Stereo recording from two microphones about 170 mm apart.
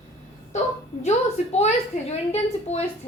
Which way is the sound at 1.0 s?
40° left (ahead or behind).